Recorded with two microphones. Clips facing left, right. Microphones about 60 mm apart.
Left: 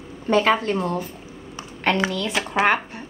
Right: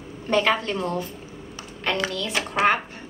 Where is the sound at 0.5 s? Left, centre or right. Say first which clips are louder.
Left 3 dB; left.